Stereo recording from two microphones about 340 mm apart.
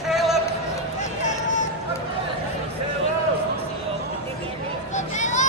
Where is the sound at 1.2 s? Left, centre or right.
Left.